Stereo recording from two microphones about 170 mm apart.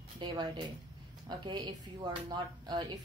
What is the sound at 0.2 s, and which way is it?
Speech, 25° right (ahead or behind).